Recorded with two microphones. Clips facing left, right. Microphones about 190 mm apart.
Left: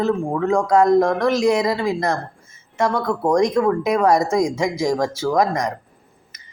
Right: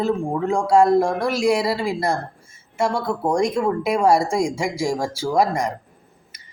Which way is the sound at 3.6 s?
30° right (ahead or behind).